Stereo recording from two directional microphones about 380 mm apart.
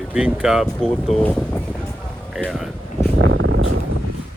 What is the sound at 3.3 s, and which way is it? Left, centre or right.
Vehicle, right.